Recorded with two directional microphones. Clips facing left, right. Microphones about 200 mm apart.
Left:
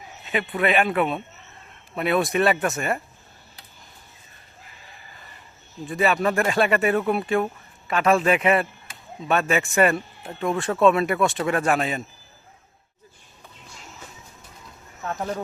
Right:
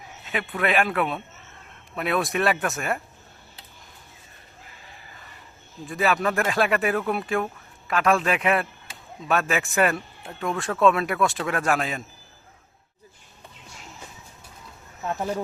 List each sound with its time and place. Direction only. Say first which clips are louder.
0.5 s a man's voice: left 2 dB; centre (ahead or behind)
5.8 s a man's voice: left 2 dB; centre (ahead or behind)
15.1 s speech: right 1 dB; 10° right (ahead or behind)